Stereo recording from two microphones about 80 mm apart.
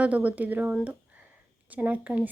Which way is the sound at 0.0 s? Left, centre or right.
Centre.